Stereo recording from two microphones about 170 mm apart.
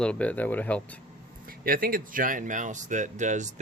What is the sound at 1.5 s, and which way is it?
Speech, 55° right (ahead or behind).